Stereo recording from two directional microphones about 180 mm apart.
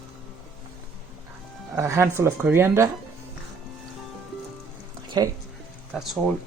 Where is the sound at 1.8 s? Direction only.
15° right (ahead or behind).